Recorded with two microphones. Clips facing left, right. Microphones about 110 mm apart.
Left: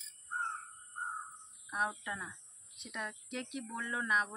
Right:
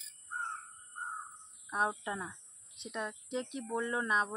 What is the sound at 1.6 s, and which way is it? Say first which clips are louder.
Speech: right 3 dB; 30° right (ahead or behind).